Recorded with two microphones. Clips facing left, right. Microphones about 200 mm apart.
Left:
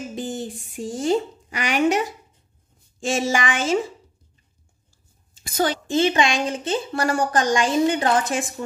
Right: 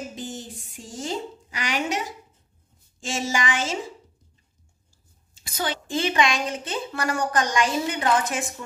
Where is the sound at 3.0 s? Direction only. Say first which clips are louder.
Left 5 dB; 60° left (ahead or behind).